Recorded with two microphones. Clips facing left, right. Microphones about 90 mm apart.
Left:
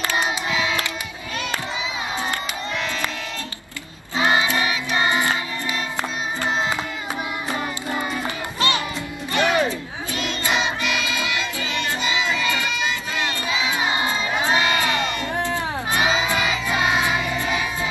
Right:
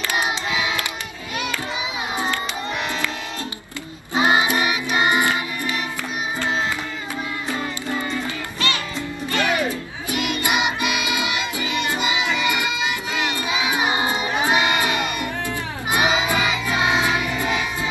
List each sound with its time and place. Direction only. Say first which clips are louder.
0.1 s child singing: right 2 dB; 15° right (ahead or behind)
4.1 s music: right 2 dB; 20° right (ahead or behind)
7.5 s music: even; 20° left (ahead or behind)
10.1 s music: right 2 dB; 15° right (ahead or behind)